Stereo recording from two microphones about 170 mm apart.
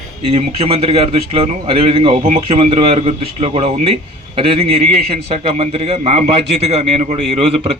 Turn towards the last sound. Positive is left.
turn(degrees=-35)  # may be behind; listen again after turning